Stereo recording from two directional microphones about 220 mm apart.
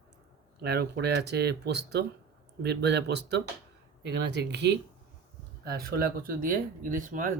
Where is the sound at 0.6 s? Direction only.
45° right (ahead or behind).